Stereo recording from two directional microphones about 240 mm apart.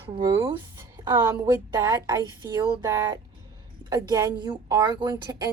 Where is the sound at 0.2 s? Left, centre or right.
Centre.